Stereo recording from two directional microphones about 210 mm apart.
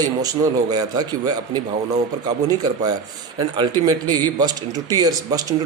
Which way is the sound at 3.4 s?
20° right (ahead or behind).